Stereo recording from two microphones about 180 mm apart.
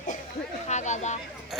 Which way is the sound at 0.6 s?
40° left (ahead or behind).